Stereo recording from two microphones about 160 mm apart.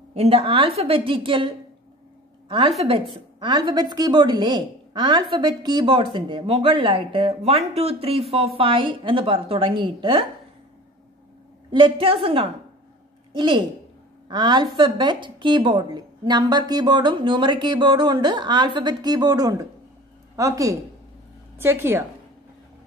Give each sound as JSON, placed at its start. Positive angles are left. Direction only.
{"t": 0.1, "sound": "a woman's voice", "side_deg": -40}
{"t": 11.7, "sound": "a woman's voice", "side_deg": -35}